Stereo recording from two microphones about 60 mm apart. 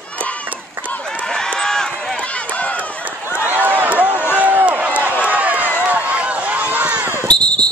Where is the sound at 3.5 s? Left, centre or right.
Right.